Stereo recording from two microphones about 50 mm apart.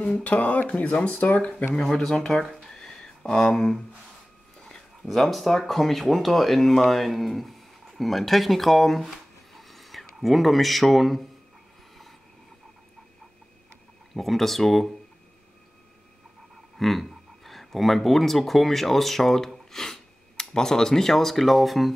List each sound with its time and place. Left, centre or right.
0.2 s speech: left
1.8 s speech: centre
2.4 s a sound: centre
4.6 s speech: centre
14.1 s speech: centre
16.7 s speech: centre